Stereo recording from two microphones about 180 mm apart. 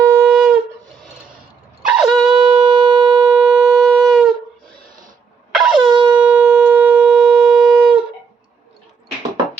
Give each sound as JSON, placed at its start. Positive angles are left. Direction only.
{"t": 0.2, "sound": "wind instrument", "side_deg": -5}
{"t": 1.9, "sound": "shofar", "side_deg": 0}
{"t": 2.4, "sound": "sine wave", "side_deg": -30}
{"t": 3.3, "sound": "shofar", "side_deg": -5}
{"t": 5.5, "sound": "shofar", "side_deg": 0}
{"t": 5.9, "sound": "shofar", "side_deg": -25}
{"t": 6.1, "sound": "shofar", "side_deg": -5}